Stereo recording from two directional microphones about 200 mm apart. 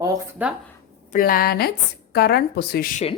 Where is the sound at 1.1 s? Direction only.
45° left (ahead or behind).